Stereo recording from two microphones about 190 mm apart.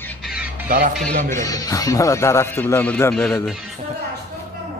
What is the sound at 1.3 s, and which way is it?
Speech, 15° left (ahead or behind).